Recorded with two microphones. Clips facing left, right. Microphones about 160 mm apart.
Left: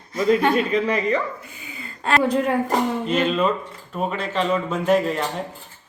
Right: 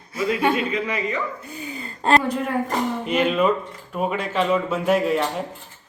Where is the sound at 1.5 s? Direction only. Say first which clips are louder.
Right 6 dB; 40° right (ahead or behind).